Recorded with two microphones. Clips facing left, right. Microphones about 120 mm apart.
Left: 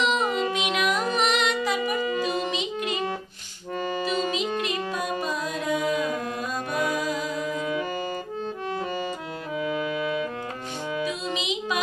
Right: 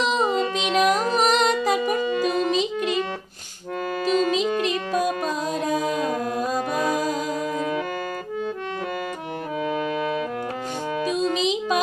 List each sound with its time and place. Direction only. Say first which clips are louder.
0.0 s music: right 2 dB; 35° right (ahead or behind)
4.9 s music: right 5 dB; 40° right (ahead or behind)
11.0 s music: right 8 dB; 40° right (ahead or behind)